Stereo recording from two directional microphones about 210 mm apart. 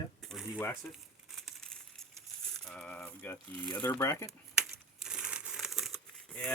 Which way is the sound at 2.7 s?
5° left (ahead or behind).